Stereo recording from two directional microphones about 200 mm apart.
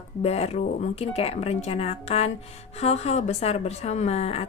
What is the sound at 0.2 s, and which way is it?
A woman's voice, 30° left (ahead or behind).